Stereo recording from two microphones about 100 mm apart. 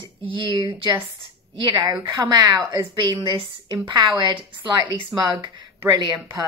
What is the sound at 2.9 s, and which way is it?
A woman's voice, 55° right (ahead or behind).